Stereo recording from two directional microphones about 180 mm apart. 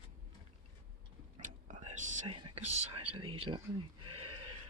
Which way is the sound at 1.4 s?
45° right (ahead or behind).